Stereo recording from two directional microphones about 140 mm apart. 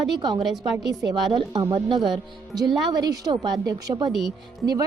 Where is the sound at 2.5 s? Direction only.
30° right (ahead or behind).